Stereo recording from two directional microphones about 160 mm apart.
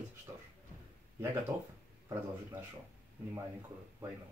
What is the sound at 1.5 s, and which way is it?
Speech, 15° right (ahead or behind).